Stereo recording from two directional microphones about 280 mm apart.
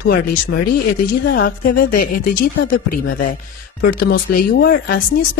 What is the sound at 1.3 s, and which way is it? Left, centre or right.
Speech, left.